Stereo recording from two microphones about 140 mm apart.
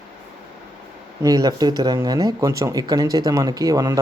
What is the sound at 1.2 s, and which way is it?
Speech, 25° right (ahead or behind).